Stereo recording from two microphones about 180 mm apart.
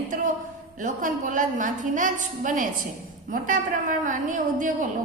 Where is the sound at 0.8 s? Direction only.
45° right (ahead or behind).